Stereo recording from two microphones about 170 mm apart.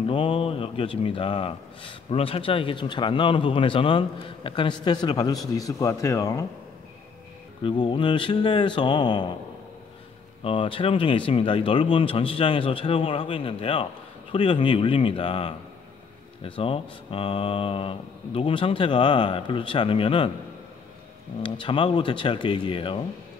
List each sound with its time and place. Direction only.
0.0 s speech: 30° left (ahead or behind)
7.6 s speech: 30° left (ahead or behind)
10.4 s speech: 30° left (ahead or behind)
21.4 s speech: 30° left (ahead or behind)